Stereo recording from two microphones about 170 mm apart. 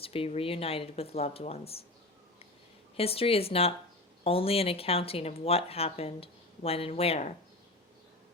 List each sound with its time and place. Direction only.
0.0 s speech: 35° left (ahead or behind)
3.0 s speech: 35° left (ahead or behind)